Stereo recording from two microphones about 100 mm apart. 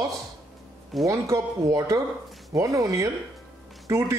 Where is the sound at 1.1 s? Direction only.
35° right (ahead or behind).